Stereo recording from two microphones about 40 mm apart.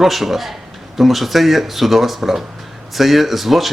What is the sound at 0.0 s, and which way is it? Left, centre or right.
Speech, centre.